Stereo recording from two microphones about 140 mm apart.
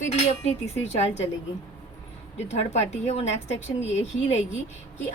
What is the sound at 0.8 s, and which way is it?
Speech, 50° left (ahead or behind).